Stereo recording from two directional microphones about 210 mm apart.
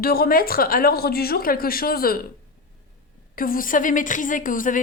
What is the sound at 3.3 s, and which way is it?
A woman's voice, 40° left (ahead or behind).